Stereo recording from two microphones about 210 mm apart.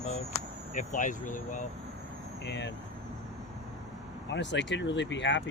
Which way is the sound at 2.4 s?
55° left (ahead or behind).